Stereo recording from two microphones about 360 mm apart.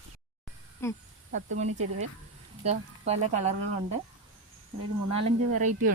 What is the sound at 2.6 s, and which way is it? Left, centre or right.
Speech, centre.